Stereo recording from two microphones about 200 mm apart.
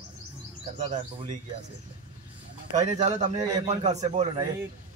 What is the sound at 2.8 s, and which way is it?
A man's voice, 35° right (ahead or behind).